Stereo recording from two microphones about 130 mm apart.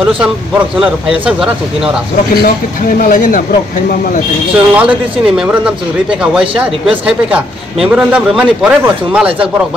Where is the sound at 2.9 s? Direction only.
90° left.